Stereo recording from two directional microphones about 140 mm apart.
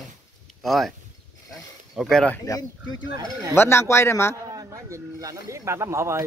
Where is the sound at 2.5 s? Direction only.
25° left (ahead or behind).